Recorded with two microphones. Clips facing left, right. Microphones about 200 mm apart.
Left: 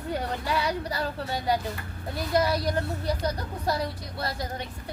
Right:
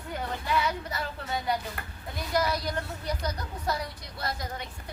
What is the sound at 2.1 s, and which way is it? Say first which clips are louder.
Speech: left 3 dB; 30° left (ahead or behind).